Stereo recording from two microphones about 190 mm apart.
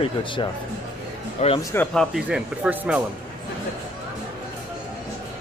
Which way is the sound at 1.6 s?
10° left (ahead or behind).